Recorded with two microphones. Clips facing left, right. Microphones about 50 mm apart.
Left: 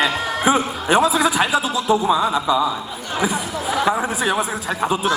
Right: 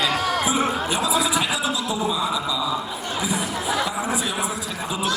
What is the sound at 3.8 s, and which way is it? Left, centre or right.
Speech, left.